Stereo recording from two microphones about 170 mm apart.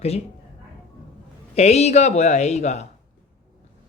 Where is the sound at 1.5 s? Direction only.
40° left (ahead or behind).